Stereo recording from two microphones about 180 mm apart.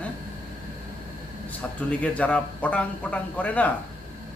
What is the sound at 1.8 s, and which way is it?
A man's voice, 10° left (ahead or behind).